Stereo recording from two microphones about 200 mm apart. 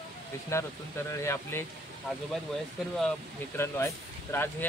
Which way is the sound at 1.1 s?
15° left (ahead or behind).